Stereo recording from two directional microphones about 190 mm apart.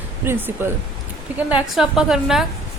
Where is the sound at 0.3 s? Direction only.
10° right (ahead or behind).